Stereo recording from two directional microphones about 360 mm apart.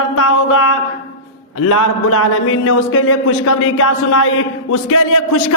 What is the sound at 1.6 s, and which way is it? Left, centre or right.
Speech, left.